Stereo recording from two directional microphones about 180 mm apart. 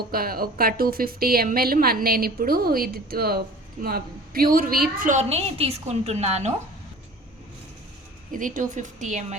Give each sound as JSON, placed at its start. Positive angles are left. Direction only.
{"t": 0.1, "sound": "a woman's voice", "side_deg": -55}
{"t": 8.3, "sound": "speech", "side_deg": -45}